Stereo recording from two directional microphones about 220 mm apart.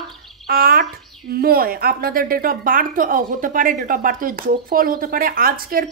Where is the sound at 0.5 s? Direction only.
45° right (ahead or behind).